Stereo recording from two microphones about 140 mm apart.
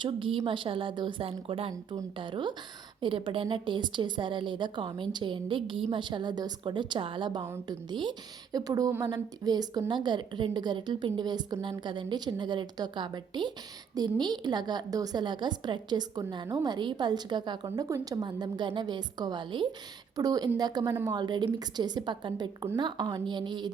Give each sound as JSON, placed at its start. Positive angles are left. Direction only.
{"t": 0.0, "sound": "a woman's voice", "side_deg": -40}
{"t": 1.7, "sound": "a woman's voice", "side_deg": -25}
{"t": 2.1, "sound": "a woman's voice", "side_deg": -35}